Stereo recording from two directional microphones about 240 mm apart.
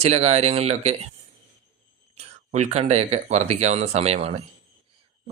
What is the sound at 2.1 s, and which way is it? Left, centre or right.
Speech, right.